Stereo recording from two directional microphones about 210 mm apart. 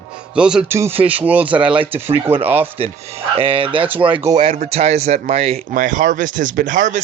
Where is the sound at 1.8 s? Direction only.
30° right (ahead or behind).